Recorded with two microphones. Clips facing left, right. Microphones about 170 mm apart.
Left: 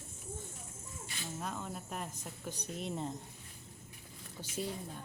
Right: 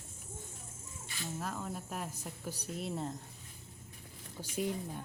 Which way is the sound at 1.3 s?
Centre (ahead or behind).